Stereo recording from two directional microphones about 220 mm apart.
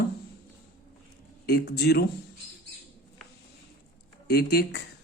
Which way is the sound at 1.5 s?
45° left (ahead or behind).